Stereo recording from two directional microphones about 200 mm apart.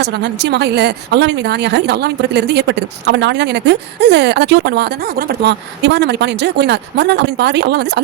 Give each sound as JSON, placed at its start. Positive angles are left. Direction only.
{"t": 0.0, "sound": "speech", "side_deg": -60}